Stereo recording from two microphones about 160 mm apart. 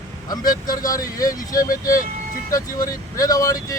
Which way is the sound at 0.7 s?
20° left (ahead or behind).